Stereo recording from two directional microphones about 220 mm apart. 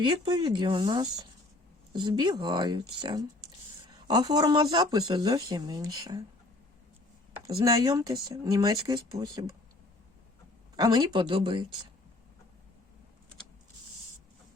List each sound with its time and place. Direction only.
0.0 s speech: 20° right (ahead or behind)
7.4 s speech: 15° right (ahead or behind)
10.8 s speech: 15° right (ahead or behind)